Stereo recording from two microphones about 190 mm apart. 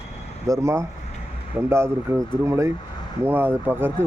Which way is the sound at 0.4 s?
15° right (ahead or behind).